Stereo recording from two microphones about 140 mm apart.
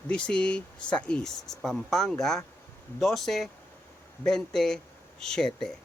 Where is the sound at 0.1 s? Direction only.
5° left (ahead or behind).